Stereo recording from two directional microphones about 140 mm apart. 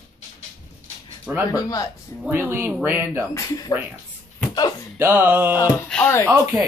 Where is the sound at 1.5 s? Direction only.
25° left (ahead or behind).